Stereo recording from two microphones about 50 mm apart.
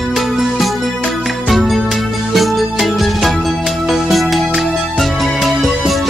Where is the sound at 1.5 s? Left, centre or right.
Centre.